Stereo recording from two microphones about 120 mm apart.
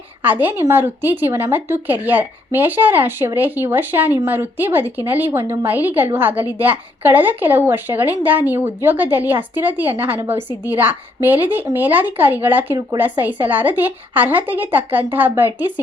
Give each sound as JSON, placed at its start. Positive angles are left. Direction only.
{"t": 0.2, "sound": "a woman's voice", "side_deg": -15}